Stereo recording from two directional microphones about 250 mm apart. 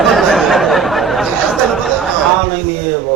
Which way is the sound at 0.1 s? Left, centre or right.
Centre.